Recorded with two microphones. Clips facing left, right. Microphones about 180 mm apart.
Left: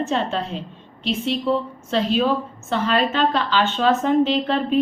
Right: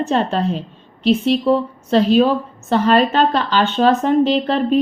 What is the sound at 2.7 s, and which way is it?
A woman's voice, 40° right (ahead or behind).